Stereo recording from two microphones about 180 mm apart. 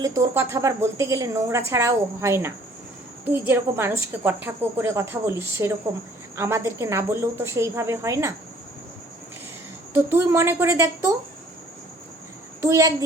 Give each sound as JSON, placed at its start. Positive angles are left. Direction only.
{"t": 0.0, "sound": "a woman's voice", "side_deg": -15}
{"t": 9.9, "sound": "a woman's voice", "side_deg": -15}
{"t": 12.6, "sound": "a woman's voice", "side_deg": -15}